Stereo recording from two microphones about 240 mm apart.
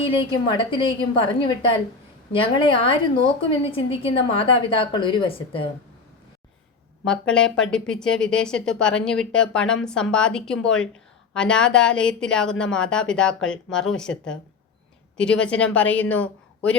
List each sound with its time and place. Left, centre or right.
0.0 s a woman's voice: left
7.0 s a woman's voice: centre